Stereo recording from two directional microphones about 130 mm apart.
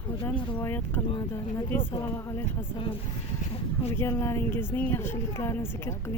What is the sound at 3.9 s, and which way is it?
Speech, 20° left (ahead or behind).